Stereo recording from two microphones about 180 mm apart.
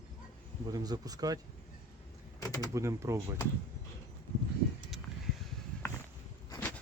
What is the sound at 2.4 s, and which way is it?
Speech, 20° left (ahead or behind).